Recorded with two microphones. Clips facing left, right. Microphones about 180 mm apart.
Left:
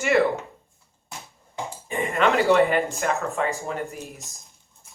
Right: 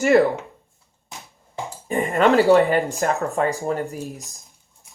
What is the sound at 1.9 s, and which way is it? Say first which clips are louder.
Speech: right 5 dB; 35° right (ahead or behind).